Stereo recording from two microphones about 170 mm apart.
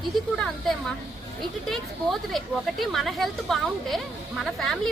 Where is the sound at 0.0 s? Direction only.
Centre (ahead or behind).